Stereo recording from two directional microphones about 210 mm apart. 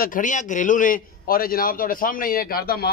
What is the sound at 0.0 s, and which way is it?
Speech, 40° left (ahead or behind).